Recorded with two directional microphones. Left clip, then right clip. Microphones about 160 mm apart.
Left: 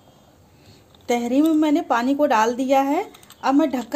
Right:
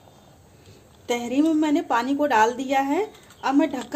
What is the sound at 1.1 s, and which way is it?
A woman's voice, 40° left (ahead or behind).